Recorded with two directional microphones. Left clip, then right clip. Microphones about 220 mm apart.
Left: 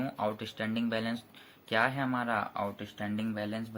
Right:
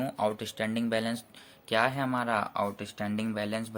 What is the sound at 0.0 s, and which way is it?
Speech, 25° right (ahead or behind).